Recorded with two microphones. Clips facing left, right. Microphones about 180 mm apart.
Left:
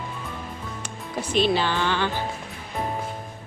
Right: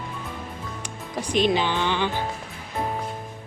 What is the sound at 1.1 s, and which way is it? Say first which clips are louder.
Speech: even; 15° right (ahead or behind).